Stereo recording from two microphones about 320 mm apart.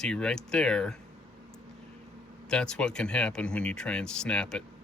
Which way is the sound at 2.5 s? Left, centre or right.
Centre.